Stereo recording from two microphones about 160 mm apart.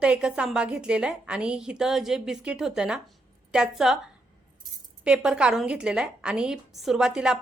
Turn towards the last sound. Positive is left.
turn(degrees=-5)  # may be behind; listen again after turning